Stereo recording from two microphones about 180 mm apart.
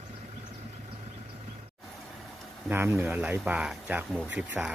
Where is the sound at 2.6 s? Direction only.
10° right (ahead or behind).